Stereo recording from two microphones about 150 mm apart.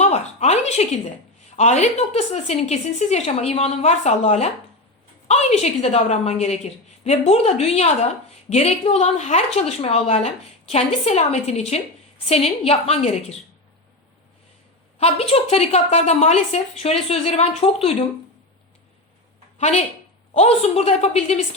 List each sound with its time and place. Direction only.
0.0 s a sound: 45° left (ahead or behind)
1.5 s a woman's voice: 50° left (ahead or behind)
14.9 s a woman's voice: 40° left (ahead or behind)
19.5 s a woman's voice: 45° left (ahead or behind)